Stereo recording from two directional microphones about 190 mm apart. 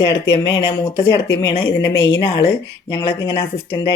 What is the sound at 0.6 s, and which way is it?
Speech, 30° left (ahead or behind).